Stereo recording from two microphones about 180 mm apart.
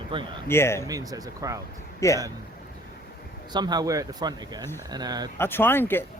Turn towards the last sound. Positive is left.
turn(degrees=10)  # may be behind; listen again after turning